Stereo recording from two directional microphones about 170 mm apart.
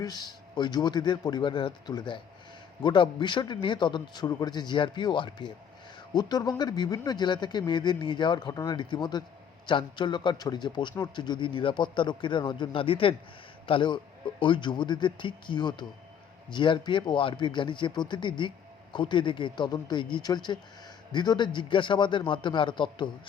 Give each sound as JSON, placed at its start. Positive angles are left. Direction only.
{"t": 0.0, "sound": "a man's voice", "side_deg": 25}